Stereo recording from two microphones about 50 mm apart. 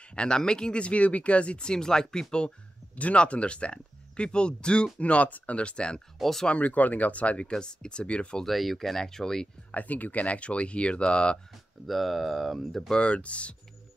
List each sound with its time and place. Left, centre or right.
0.1 s speech: centre
3.0 s speech: left
6.1 s speech: centre
6.4 s speech: left
8.5 s speech: centre
9.7 s speech: left
11.8 s speech: centre
12.9 s speech: left